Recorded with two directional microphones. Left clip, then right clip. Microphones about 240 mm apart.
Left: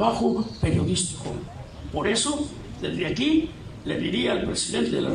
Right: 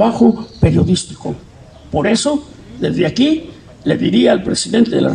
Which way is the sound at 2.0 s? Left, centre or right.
Right.